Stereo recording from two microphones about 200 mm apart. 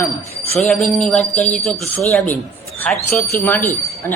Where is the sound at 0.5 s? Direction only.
Centre (ahead or behind).